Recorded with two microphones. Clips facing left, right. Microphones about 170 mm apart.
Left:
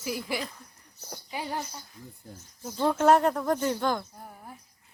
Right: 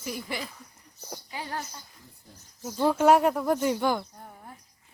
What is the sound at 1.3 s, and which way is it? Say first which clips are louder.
Speech: left 2 dB; 15° left (ahead or behind).